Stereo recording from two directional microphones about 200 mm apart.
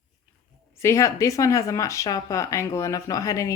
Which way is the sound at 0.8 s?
15° left (ahead or behind).